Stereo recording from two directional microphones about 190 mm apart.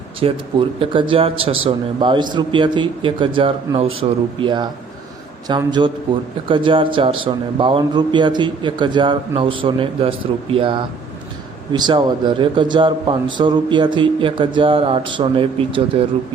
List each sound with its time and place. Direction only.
0.2 s a man's voice: 30° right (ahead or behind)